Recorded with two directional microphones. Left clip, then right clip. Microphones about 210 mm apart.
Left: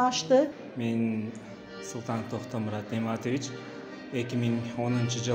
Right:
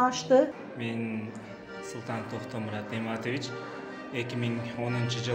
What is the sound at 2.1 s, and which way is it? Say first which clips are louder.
Speech: left 2 dB; 45° left (ahead or behind).